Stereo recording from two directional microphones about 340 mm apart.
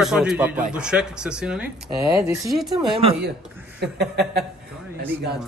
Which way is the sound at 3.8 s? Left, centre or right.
Right.